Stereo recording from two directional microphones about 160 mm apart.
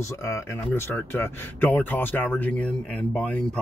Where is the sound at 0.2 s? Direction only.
15° left (ahead or behind).